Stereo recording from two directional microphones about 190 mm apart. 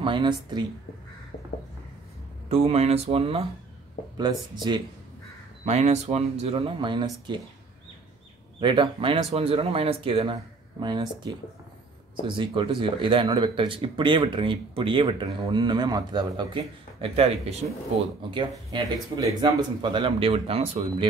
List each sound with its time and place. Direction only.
0.0 s speech: 25° right (ahead or behind)
2.5 s speech: 35° right (ahead or behind)
5.7 s speech: 35° right (ahead or behind)
8.5 s speech: 25° right (ahead or behind)
18.7 s speech: 20° right (ahead or behind)